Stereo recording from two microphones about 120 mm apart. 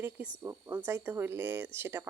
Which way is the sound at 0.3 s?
20° right (ahead or behind).